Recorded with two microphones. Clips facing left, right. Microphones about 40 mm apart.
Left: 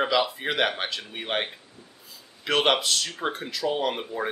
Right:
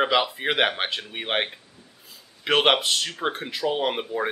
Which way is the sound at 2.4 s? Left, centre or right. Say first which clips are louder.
Right 2 dB; right.